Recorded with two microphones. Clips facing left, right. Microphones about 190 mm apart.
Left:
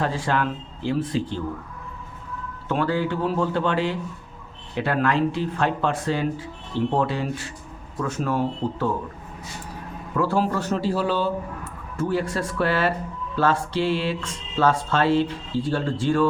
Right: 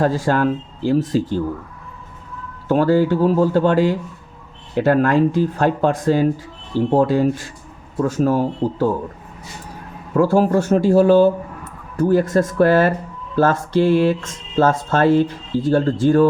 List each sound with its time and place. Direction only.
0.0 s speech: 40° right (ahead or behind)
2.6 s speech: 40° right (ahead or behind)
10.2 s speech: 45° right (ahead or behind)